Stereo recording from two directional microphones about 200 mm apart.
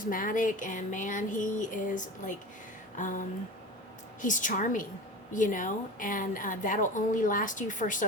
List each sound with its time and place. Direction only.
0.0 s a woman's voice: 45° left (ahead or behind)